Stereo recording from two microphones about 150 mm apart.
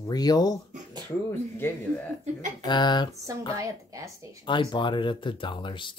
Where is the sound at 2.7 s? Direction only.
30° left (ahead or behind).